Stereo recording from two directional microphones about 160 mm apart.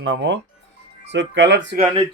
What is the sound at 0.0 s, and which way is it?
Speech, 90° right.